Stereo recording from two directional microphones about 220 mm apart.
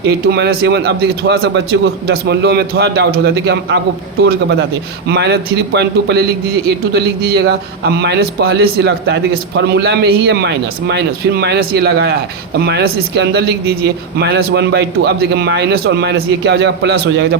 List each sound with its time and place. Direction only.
0.1 s a man's voice: 45° right (ahead or behind)
5.0 s a man's voice: 50° right (ahead or behind)